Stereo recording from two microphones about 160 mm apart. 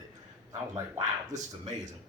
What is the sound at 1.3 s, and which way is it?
Speech, 50° right (ahead or behind).